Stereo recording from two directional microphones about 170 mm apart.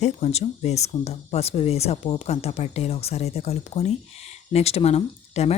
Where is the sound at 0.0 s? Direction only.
40° left (ahead or behind).